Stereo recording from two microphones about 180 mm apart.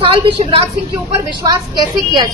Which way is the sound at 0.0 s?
30° right (ahead or behind).